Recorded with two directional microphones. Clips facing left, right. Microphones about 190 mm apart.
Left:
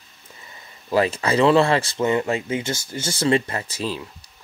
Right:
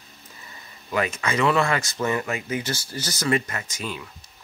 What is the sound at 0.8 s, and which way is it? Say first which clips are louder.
Speech: left 5 dB; 30° left (ahead or behind).